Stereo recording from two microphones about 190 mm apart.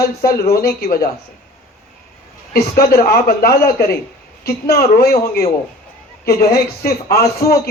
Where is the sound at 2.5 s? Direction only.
55° left (ahead or behind).